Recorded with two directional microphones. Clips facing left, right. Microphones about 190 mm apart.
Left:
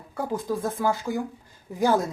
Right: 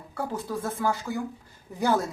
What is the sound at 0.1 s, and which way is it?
Speech, 15° left (ahead or behind).